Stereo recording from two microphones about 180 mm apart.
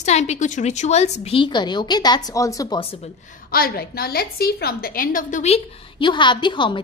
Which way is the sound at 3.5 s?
55° left (ahead or behind).